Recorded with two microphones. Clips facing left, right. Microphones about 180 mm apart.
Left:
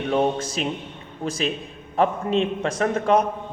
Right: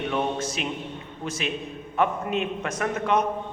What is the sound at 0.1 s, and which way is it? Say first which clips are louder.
A man's voice: left 8 dB; 35° left (ahead or behind).